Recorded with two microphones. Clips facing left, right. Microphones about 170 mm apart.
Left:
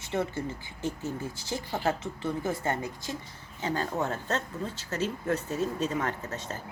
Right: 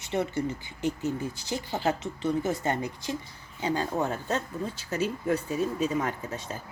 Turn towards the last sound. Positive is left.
turn(degrees=-10)  # may be behind; listen again after turning